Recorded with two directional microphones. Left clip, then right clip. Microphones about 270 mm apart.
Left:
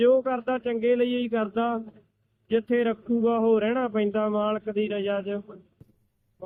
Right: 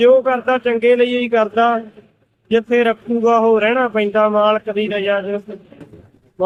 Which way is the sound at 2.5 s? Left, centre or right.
Centre.